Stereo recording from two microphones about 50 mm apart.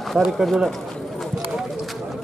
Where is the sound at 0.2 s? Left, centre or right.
Centre.